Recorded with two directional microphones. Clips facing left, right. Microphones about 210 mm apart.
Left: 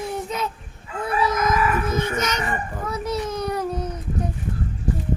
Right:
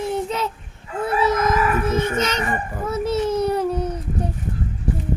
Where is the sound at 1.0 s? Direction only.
30° right (ahead or behind).